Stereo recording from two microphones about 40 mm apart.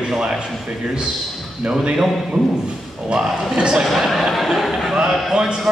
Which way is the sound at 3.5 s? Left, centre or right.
Right.